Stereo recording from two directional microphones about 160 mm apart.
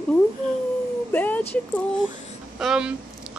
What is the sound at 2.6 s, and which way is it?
Speech, 5° right (ahead or behind).